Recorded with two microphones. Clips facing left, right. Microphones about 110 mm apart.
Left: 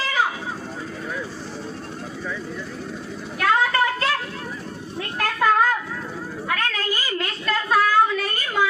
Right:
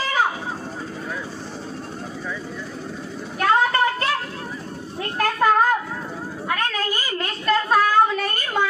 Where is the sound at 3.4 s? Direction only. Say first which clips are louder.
Right 1 dB; 30° right (ahead or behind).